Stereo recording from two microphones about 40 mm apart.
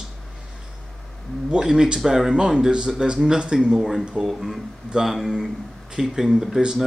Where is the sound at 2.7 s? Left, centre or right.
Right.